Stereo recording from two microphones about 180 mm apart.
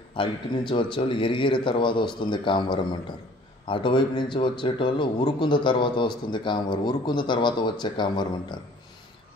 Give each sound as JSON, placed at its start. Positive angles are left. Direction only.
{"t": 0.1, "sound": "a man's voice", "side_deg": 30}